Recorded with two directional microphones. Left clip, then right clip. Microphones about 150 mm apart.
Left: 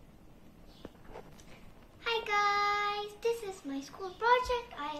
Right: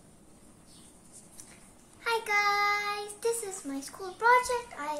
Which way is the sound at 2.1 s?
20° right (ahead or behind).